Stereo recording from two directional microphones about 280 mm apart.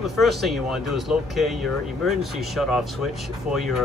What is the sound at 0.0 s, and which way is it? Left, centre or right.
Speech, centre.